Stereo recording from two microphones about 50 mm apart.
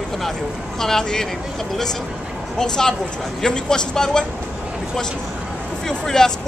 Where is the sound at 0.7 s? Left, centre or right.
Centre.